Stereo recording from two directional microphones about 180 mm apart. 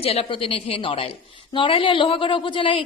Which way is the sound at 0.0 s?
35° left (ahead or behind).